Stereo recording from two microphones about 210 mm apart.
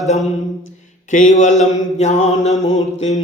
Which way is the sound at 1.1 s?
35° left (ahead or behind).